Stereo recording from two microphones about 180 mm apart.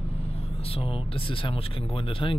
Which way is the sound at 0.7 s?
30° left (ahead or behind).